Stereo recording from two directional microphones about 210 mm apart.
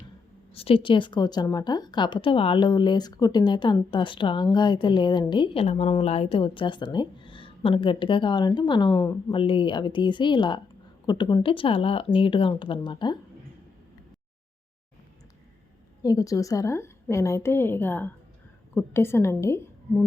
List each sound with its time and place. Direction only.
0.5 s a woman's voice: 25° left (ahead or behind)
16.0 s a woman's voice: 15° left (ahead or behind)